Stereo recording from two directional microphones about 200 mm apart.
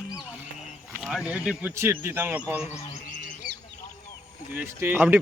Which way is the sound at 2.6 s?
35° left (ahead or behind).